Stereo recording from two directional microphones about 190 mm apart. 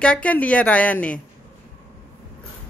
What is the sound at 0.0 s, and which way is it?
A woman's voice, 5° left (ahead or behind).